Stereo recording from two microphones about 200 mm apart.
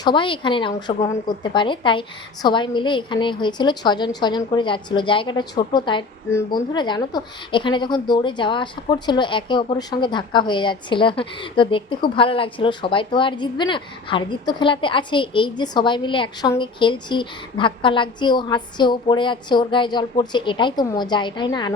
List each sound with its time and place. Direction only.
0.0 s a woman's voice: 25° left (ahead or behind)